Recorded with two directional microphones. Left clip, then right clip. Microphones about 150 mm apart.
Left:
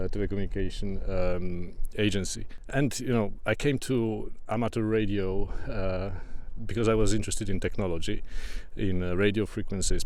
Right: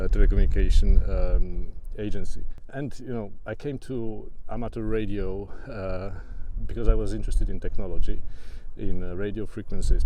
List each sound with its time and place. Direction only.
0.0 s speech: 5° left (ahead or behind)
1.0 s speech: 20° left (ahead or behind)
4.9 s speech: 20° left (ahead or behind)
6.7 s speech: 35° left (ahead or behind)